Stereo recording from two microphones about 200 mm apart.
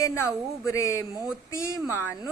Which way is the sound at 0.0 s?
15° left (ahead or behind).